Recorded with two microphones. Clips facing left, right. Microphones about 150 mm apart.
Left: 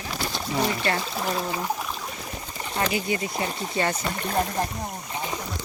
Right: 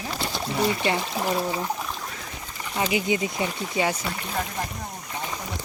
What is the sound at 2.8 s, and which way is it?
Speech, 15° right (ahead or behind).